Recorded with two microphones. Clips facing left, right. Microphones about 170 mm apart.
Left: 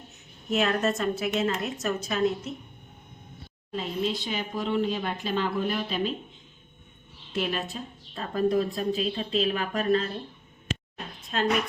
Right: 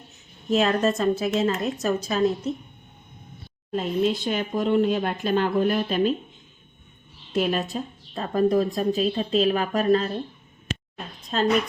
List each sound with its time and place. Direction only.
0.5 s a woman's voice: 30° right (ahead or behind)
3.7 s speech: 50° right (ahead or behind)
7.3 s a woman's voice: 45° right (ahead or behind)